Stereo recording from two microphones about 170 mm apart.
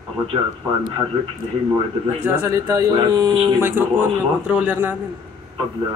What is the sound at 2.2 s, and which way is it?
Speech, 15° right (ahead or behind).